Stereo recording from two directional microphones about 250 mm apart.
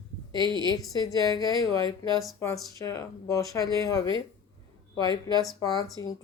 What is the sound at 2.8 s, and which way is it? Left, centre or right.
Speech, centre.